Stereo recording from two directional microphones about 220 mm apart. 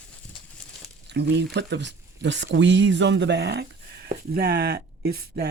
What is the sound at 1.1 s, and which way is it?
Speech, 50° right (ahead or behind).